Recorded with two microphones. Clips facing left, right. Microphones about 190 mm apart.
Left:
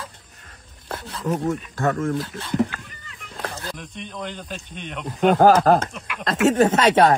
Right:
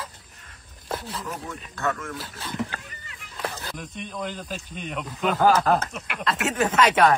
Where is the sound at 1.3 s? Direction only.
30° left (ahead or behind).